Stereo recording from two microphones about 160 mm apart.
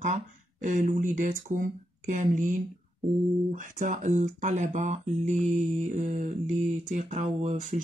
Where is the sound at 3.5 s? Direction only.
55° right (ahead or behind).